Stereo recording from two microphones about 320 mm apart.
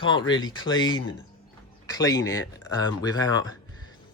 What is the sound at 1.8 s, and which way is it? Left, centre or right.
Speech, centre.